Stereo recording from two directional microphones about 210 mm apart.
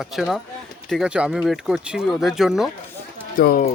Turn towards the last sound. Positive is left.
turn(degrees=45)  # may be behind; listen again after turning